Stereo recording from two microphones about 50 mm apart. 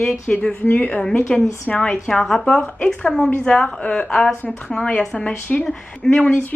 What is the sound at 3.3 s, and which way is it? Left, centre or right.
A woman's voice, left.